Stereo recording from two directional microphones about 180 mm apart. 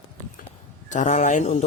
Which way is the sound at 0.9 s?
40° left (ahead or behind).